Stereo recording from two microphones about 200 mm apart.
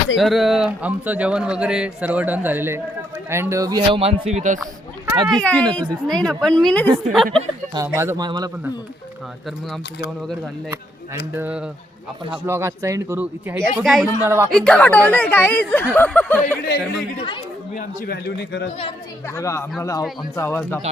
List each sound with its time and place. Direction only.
0.2 s speech: centre (ahead or behind); by 4.6 s 35° right (ahead or behind)
5.1 s speech: 20° right (ahead or behind)
5.4 s speech: 5° left (ahead or behind)
7.3 s speech: 20° right (ahead or behind)
11.3 s speech: 5° right (ahead or behind)
13.8 s speech: centre (ahead or behind)
14.3 s speech: 15° right (ahead or behind)
14.5 s speech: 5° left (ahead or behind)
17.2 s speech: 25° left (ahead or behind)
17.7 s a man's voice: 45° left (ahead or behind)
19.3 s speech: 15° left (ahead or behind)